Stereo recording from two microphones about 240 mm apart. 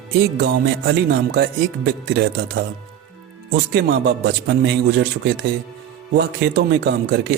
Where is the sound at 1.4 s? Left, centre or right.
Right.